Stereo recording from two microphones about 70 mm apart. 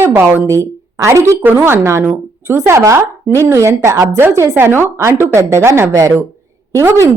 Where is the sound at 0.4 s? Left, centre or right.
Right.